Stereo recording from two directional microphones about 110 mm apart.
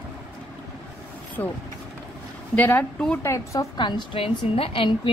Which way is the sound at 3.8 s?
45° left (ahead or behind).